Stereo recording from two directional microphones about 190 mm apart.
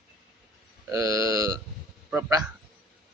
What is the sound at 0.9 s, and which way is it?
Speech, 20° right (ahead or behind).